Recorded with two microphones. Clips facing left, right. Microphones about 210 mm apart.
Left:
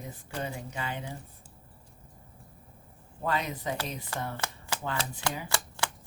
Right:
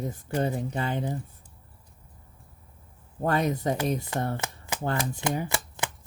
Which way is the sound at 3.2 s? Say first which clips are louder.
Right 6 dB; 45° right (ahead or behind).